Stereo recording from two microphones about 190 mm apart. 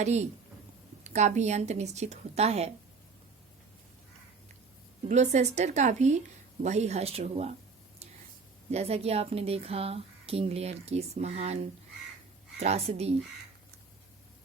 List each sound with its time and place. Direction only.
0.0 s speech: 35° right (ahead or behind)
5.0 s speech: 35° right (ahead or behind)
8.7 s speech: 35° right (ahead or behind)